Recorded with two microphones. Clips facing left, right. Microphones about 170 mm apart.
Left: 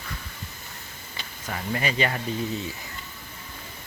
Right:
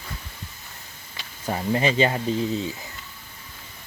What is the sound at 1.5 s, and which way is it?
Speech, 25° right (ahead or behind).